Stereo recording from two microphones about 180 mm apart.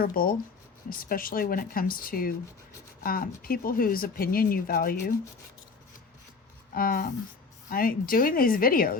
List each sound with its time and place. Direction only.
0.0 s speech: 55° left (ahead or behind)
6.7 s speech: 50° left (ahead or behind)